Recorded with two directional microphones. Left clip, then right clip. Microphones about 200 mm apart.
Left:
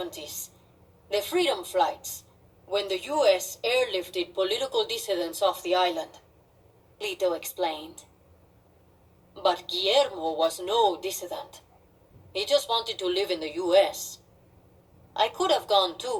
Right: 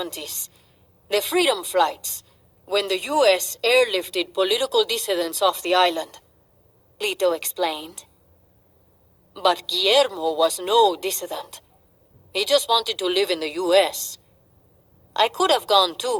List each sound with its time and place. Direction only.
0.0 s speech: 50° right (ahead or behind)
9.3 s speech: 50° right (ahead or behind)